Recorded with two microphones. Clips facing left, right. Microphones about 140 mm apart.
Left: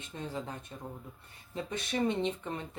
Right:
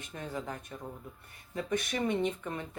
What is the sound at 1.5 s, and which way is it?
Speech, 25° left (ahead or behind).